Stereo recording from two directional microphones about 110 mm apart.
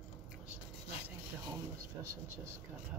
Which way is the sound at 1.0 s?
20° right (ahead or behind).